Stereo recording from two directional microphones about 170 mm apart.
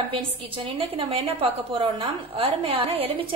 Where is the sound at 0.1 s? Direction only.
30° right (ahead or behind).